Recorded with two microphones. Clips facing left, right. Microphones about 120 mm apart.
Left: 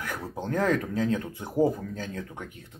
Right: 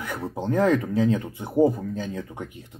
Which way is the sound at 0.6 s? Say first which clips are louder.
Right 5 dB; 15° right (ahead or behind).